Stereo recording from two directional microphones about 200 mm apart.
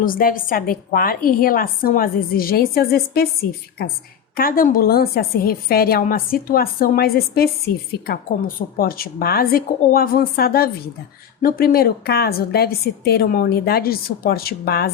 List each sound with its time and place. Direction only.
0.0 s a woman's voice: 45° left (ahead or behind)
4.4 s a woman's voice: 45° left (ahead or behind)